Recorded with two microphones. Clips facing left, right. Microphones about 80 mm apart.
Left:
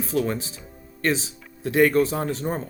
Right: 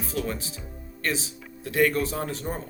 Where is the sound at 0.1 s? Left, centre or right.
Left.